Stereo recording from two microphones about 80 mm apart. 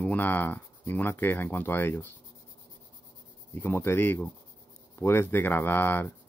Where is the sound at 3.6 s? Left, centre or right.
Left.